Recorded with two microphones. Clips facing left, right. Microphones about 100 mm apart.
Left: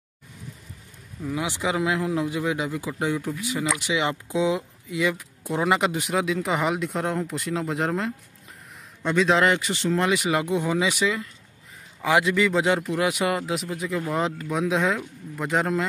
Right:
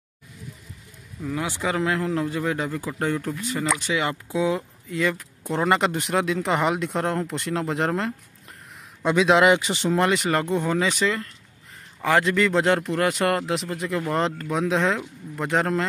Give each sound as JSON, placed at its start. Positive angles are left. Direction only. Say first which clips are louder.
{"t": 1.2, "sound": "a man's voice", "louder": "even", "side_deg": 15}
{"t": 9.6, "sound": "speech", "louder": "right 1 dB", "side_deg": -20}
{"t": 9.9, "sound": "speech", "louder": "right 2 dB", "side_deg": 0}
{"t": 10.2, "sound": "speech", "louder": "right 1 dB", "side_deg": 10}